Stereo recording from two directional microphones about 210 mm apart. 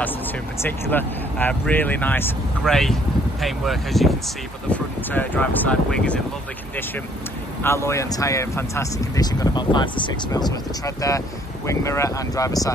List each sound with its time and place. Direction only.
0.6 s speech: 10° left (ahead or behind)
7.6 s speech: 15° left (ahead or behind)